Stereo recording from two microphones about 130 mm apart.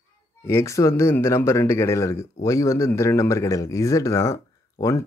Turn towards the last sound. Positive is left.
turn(degrees=25)  # may be behind; listen again after turning